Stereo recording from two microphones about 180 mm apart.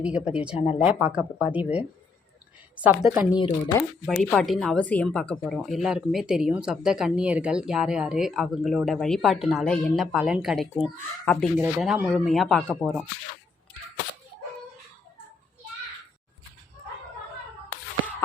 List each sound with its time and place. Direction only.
0.0 s speech: 5° right (ahead or behind)
0.6 s speech: 35° left (ahead or behind)
0.9 s speech: 10° right (ahead or behind)
3.3 s speech: 25° left (ahead or behind)
4.0 s speech: 5° left (ahead or behind)